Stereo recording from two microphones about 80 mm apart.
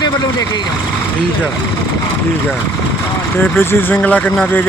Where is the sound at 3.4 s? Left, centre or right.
Left.